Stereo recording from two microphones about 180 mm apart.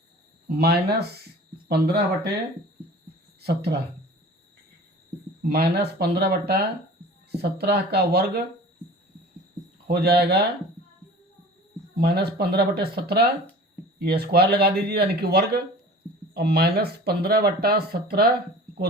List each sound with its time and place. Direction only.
0.4 s speech: 60° right (ahead or behind)
3.4 s speech: 65° right (ahead or behind)
5.5 s speech: 65° right (ahead or behind)
9.8 s speech: 65° right (ahead or behind)
11.9 s speech: 60° right (ahead or behind)